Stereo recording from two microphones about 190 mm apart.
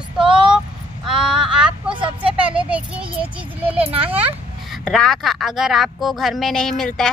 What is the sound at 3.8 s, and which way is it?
Speech, 30° right (ahead or behind).